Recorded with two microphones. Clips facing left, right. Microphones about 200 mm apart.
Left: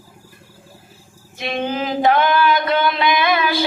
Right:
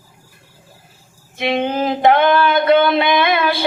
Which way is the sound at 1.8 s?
55° right (ahead or behind).